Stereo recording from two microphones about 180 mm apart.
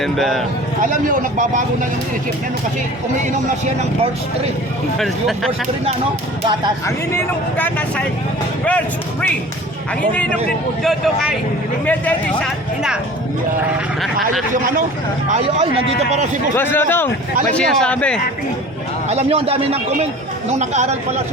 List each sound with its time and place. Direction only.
0.0 s speech: centre (ahead or behind)
0.8 s speech: 45° right (ahead or behind)
4.9 s speech: centre (ahead or behind)
6.8 s speech: 15° left (ahead or behind)
10.8 s speech: centre (ahead or behind)
14.0 s speech: centre (ahead or behind)
14.5 s speech: 50° right (ahead or behind)
15.3 s speech: 35° right (ahead or behind)
16.6 s speech: 10° left (ahead or behind)
19.0 s speech: 35° right (ahead or behind)